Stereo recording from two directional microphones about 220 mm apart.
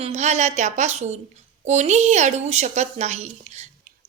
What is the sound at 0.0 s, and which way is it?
Speech, 30° right (ahead or behind).